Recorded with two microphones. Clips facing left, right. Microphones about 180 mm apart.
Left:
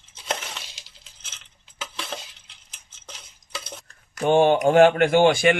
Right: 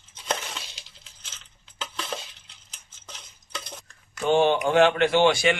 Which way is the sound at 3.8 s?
45° left (ahead or behind).